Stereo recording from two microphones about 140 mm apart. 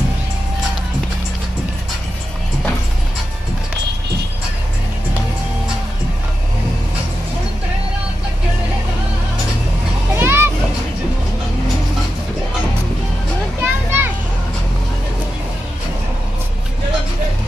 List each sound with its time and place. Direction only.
10.1 s children playing: 15° right (ahead or behind)
13.6 s children playing: 15° right (ahead or behind)